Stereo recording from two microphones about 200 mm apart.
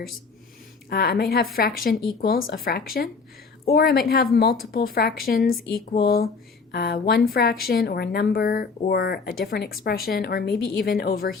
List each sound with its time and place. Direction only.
0.9 s speech: 50° left (ahead or behind)